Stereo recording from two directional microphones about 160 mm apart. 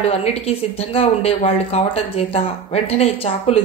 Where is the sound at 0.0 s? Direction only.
40° left (ahead or behind).